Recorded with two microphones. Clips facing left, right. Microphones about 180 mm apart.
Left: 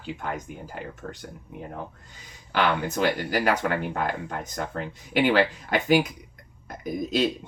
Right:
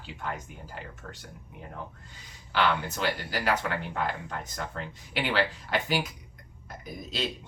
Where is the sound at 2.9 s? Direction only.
50° left (ahead or behind).